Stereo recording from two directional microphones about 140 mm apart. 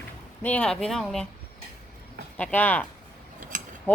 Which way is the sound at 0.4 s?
10° left (ahead or behind).